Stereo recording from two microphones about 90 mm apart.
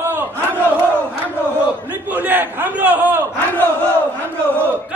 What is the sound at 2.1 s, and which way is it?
Speech, 20° right (ahead or behind).